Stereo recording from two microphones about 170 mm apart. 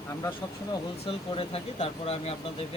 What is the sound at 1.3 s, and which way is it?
Speech, 35° left (ahead or behind).